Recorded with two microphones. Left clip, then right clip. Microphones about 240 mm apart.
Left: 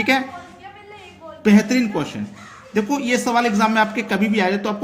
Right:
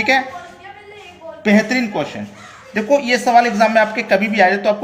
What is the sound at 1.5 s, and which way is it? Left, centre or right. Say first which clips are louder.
Speech: right 2 dB; left.